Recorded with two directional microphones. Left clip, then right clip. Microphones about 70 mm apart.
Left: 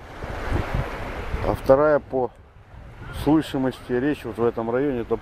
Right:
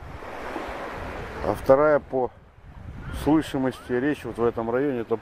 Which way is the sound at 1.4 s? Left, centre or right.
Centre.